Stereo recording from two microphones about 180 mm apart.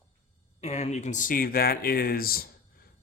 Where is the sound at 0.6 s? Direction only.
40° left (ahead or behind).